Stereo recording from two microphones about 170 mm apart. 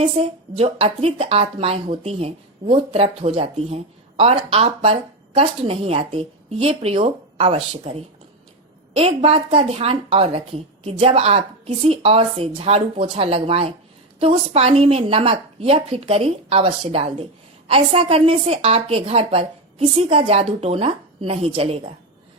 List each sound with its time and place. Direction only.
0.2 s a woman's voice: 35° right (ahead or behind)